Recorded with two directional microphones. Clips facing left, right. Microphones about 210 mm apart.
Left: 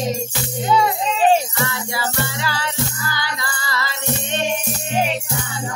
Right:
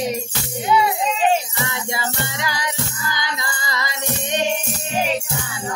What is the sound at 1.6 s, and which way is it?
Music, 20° right (ahead or behind).